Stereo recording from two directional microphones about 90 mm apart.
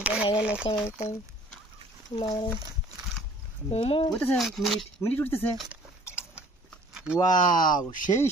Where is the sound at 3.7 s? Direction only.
80° left.